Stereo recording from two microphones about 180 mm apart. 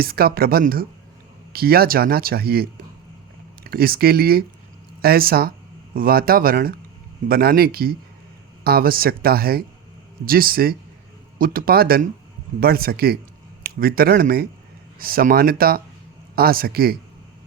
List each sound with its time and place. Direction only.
0.0 s speech: 55° right (ahead or behind)